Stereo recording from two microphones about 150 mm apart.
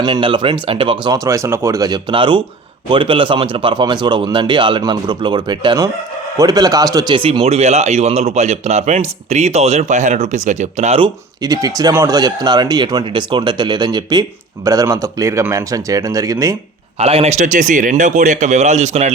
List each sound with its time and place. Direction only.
0.0 s a man's voice: 30° right (ahead or behind)
7.2 s speech: 40° right (ahead or behind)
11.0 s a man's voice: 25° right (ahead or behind)
17.0 s speech: 40° right (ahead or behind)